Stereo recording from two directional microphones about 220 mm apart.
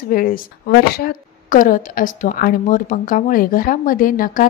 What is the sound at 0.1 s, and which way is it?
Speech, 40° left (ahead or behind).